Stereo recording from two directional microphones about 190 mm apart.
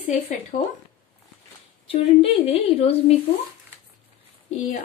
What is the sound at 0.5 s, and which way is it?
Speech, 45° left (ahead or behind).